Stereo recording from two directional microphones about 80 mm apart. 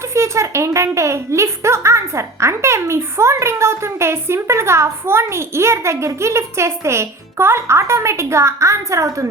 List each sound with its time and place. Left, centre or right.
0.1 s speech: right